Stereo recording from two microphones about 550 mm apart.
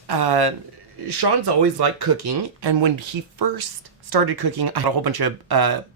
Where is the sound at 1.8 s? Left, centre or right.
Right.